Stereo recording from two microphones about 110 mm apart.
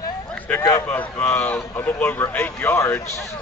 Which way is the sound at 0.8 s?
15° left (ahead or behind).